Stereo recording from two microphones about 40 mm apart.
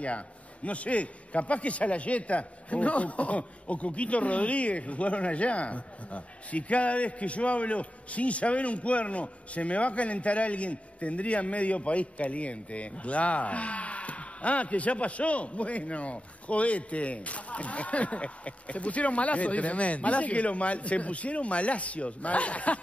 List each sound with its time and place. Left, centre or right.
0.7 s a man's voice: left